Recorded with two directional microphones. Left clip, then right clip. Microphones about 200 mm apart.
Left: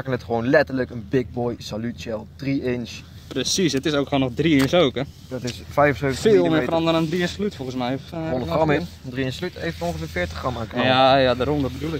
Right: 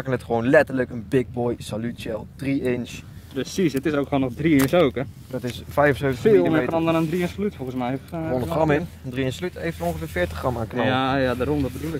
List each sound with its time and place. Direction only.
0.0 s speech: 35° right (ahead or behind)
3.3 s speech: 45° left (ahead or behind)
5.3 s speech: 35° right (ahead or behind)
6.1 s speech: 45° left (ahead or behind)
8.3 s speech: 35° right (ahead or behind)
10.8 s speech: 45° left (ahead or behind)